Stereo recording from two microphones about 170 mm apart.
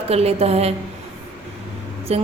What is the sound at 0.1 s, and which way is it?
Speech, 35° right (ahead or behind).